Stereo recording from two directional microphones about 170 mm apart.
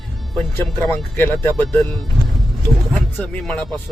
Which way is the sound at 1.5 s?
5° left (ahead or behind).